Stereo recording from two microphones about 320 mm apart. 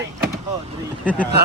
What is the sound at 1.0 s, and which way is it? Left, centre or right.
Speech, centre.